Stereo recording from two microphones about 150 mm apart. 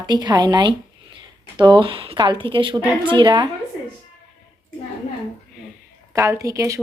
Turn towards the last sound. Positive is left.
turn(degrees=-20)  # may be behind; listen again after turning